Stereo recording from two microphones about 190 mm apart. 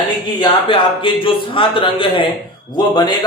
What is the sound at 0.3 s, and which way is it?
A man's voice, 25° left (ahead or behind).